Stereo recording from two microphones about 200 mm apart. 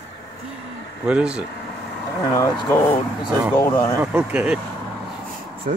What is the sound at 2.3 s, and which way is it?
Speech, 15° left (ahead or behind).